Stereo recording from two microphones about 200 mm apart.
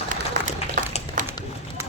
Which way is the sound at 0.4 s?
40° right (ahead or behind).